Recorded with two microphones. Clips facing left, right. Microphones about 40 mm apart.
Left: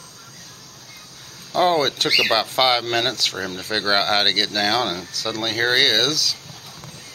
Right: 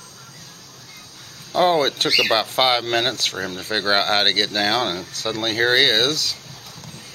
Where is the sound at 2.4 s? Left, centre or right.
Centre.